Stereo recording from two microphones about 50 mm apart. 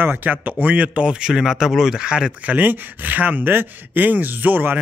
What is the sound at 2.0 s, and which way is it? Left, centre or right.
Speech, centre.